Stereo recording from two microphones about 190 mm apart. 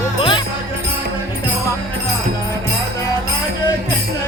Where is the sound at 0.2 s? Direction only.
25° left (ahead or behind).